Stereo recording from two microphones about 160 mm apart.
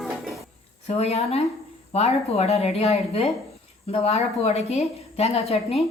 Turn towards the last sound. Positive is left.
turn(degrees=40)  # may be behind; listen again after turning